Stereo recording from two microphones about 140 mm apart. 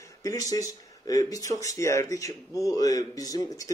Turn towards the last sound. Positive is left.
turn(degrees=25)  # may be behind; listen again after turning